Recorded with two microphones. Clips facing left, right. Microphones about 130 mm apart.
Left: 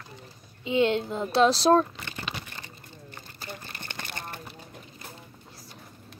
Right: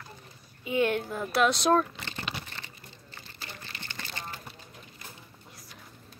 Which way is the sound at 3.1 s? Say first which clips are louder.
Left 5 dB; 45° left (ahead or behind).